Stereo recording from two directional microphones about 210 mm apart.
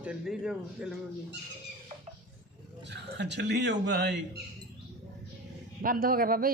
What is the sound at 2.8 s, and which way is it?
Speech, 55° right (ahead or behind).